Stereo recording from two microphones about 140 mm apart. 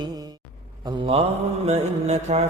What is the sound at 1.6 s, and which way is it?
Mantra, 50° right (ahead or behind).